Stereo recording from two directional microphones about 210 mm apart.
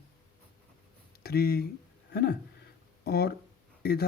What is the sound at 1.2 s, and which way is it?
Speech, 45° left (ahead or behind).